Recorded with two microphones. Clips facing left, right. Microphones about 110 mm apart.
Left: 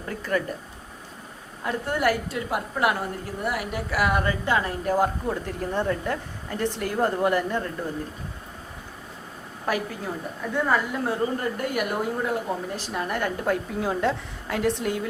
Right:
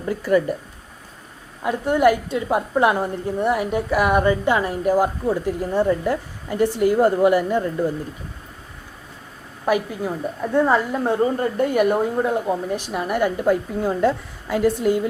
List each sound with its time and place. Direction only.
0.1 s a woman's voice: 10° right (ahead or behind)
1.6 s a woman's voice: 20° right (ahead or behind)
9.6 s a woman's voice: 15° right (ahead or behind)
10.5 s a woman's voice: 30° right (ahead or behind); by 15.0 s centre (ahead or behind)